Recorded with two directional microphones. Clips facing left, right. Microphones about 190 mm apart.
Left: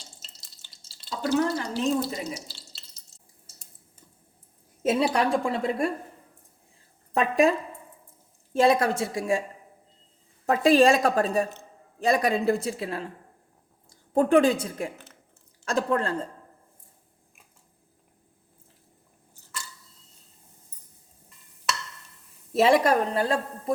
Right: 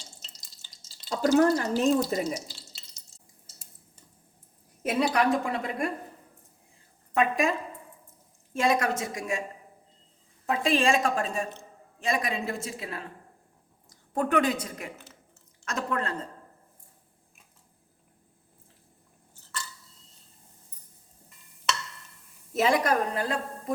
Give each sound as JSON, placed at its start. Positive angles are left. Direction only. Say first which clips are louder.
{"t": 1.1, "sound": "speech", "louder": "right 4 dB", "side_deg": -45}
{"t": 4.8, "sound": "a woman's voice", "louder": "left 2 dB", "side_deg": 25}
{"t": 7.1, "sound": "a woman's voice", "louder": "left 4 dB", "side_deg": 35}
{"t": 8.5, "sound": "a woman's voice", "louder": "left 5 dB", "side_deg": 30}
{"t": 10.4, "sound": "a woman's voice", "louder": "left 6 dB", "side_deg": 40}
{"t": 22.5, "sound": "a woman's voice", "louder": "left 4 dB", "side_deg": 30}